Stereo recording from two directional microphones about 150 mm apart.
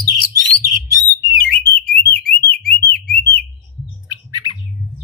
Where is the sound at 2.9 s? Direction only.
90° left.